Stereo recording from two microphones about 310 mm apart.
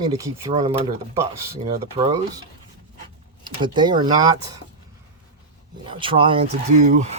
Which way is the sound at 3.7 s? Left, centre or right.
Centre.